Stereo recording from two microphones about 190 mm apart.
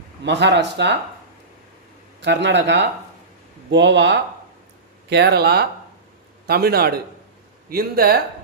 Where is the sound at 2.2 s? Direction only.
65° right (ahead or behind).